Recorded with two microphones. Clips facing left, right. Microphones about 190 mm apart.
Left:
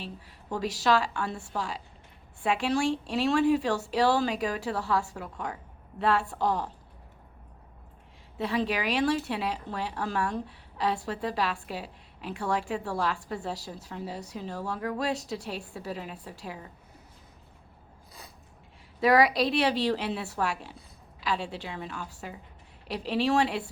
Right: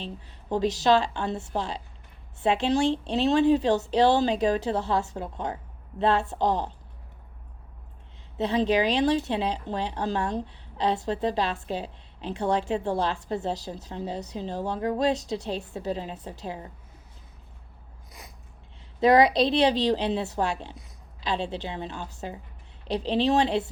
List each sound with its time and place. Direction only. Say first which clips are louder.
0.0 s speech: right 3 dB; 20° right (ahead or behind)
8.4 s speech: right 6 dB; 20° right (ahead or behind)
18.9 s speech: right 3 dB; 20° right (ahead or behind)